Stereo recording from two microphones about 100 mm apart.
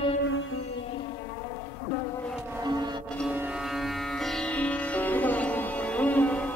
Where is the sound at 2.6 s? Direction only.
45° right (ahead or behind).